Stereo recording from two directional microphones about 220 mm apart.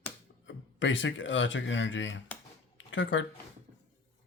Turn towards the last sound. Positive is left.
turn(degrees=60)  # may be behind; listen again after turning